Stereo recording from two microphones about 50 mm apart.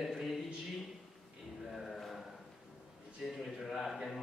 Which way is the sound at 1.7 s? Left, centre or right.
Centre.